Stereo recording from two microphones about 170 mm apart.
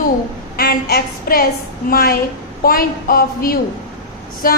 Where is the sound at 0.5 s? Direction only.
65° left (ahead or behind).